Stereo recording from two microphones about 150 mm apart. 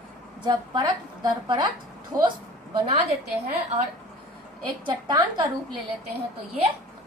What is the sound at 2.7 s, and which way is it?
Speech, 35° right (ahead or behind).